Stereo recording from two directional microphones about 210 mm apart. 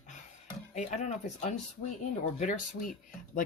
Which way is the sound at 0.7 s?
35° left (ahead or behind).